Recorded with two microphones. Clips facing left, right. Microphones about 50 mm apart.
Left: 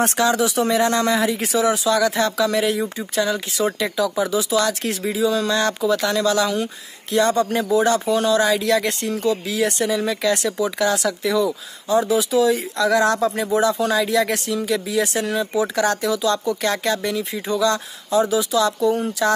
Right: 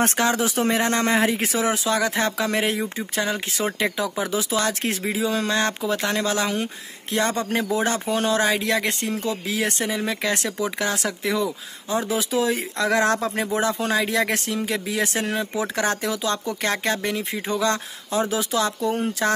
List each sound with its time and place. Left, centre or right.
0.0 s speech: right